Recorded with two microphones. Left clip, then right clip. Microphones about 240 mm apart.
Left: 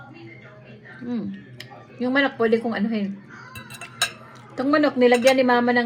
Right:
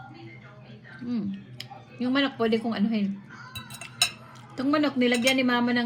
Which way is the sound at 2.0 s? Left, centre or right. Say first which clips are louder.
Left 5 dB; centre.